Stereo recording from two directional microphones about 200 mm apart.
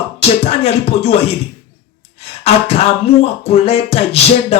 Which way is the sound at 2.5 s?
30° left (ahead or behind).